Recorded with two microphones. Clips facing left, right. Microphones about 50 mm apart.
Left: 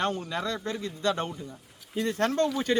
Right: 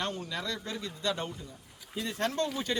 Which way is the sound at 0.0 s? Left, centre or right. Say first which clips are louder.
Left 6 dB; left.